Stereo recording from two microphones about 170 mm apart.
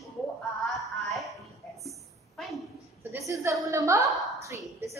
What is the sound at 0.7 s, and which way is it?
Music, centre (ahead or behind).